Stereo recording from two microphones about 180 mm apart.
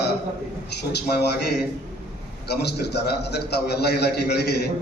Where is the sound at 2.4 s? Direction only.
65° left (ahead or behind).